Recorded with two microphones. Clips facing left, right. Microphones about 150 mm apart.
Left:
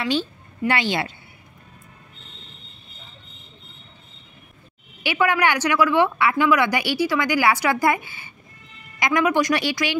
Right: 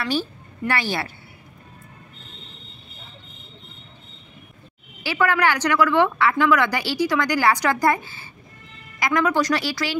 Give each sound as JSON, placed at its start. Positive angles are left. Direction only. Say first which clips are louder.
{"t": 0.0, "sound": "speech", "louder": "left 1 dB", "side_deg": 20}
{"t": 5.0, "sound": "a woman's voice", "louder": "even", "side_deg": 15}